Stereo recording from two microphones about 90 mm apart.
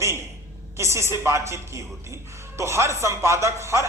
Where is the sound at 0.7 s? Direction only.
30° right (ahead or behind).